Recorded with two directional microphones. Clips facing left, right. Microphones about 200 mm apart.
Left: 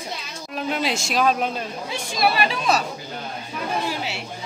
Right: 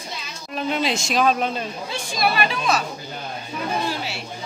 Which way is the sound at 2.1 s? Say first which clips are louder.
Left 1 dB; 35° left (ahead or behind).